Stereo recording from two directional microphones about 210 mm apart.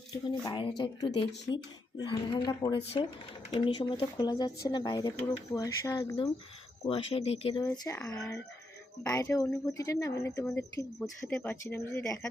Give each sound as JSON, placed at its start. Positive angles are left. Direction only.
{"t": 0.1, "sound": "a woman's voice", "side_deg": 20}
{"t": 7.7, "sound": "a woman's voice", "side_deg": 5}